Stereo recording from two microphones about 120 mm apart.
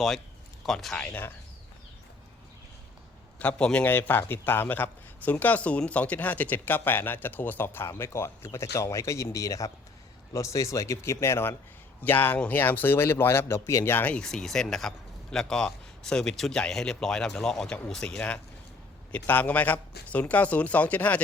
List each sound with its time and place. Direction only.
0.6 s speech: centre (ahead or behind)
1.0 s a man's voice: 20° left (ahead or behind)
3.3 s a man's voice: 10° left (ahead or behind)